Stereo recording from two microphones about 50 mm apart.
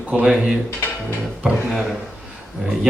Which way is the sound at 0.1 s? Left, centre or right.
Centre.